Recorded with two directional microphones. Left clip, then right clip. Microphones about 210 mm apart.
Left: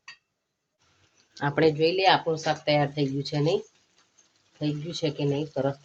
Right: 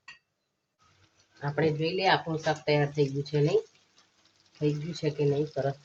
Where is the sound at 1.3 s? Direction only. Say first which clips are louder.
Left 6 dB; 55° left (ahead or behind).